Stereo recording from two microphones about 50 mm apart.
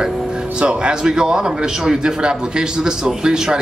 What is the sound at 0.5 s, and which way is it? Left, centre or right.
A woman's voice, right.